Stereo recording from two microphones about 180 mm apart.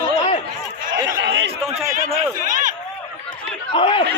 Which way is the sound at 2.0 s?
45° right (ahead or behind).